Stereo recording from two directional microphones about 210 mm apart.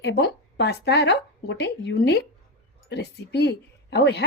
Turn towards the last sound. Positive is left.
turn(degrees=55)  # may be behind; listen again after turning